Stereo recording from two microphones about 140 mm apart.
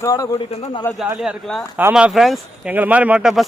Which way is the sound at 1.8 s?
10° right (ahead or behind).